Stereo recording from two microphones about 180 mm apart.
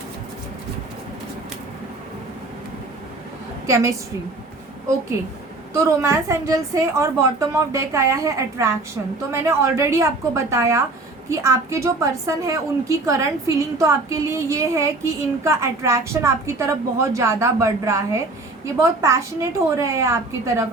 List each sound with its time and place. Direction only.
5.7 s a woman's voice: 15° right (ahead or behind)